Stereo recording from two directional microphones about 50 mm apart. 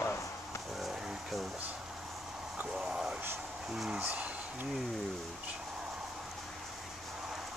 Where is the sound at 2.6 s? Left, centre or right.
Centre.